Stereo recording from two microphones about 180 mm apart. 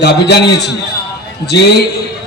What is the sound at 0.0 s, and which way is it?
Speech, 65° left (ahead or behind).